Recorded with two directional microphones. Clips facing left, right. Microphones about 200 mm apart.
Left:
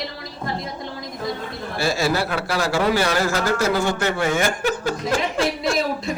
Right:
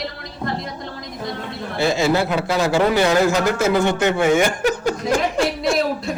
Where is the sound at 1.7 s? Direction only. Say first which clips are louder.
Right 4 dB; 20° right (ahead or behind).